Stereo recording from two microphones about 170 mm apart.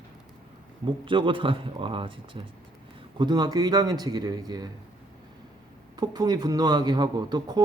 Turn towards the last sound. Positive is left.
turn(degrees=-25)  # may be behind; listen again after turning